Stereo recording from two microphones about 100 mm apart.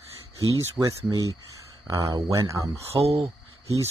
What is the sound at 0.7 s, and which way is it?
Speech, 30° right (ahead or behind).